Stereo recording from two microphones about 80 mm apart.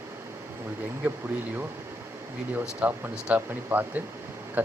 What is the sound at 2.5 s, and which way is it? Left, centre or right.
Speech, right.